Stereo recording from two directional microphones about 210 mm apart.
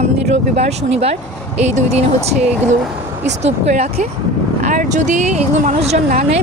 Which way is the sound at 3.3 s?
30° right (ahead or behind).